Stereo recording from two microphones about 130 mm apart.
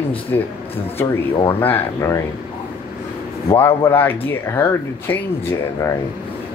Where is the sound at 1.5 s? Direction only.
15° left (ahead or behind).